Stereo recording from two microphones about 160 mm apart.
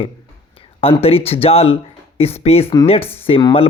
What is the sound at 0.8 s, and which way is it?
Speech, 35° left (ahead or behind).